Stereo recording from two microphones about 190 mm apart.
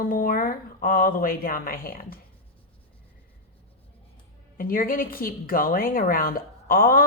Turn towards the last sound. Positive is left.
turn(degrees=50)  # may be behind; listen again after turning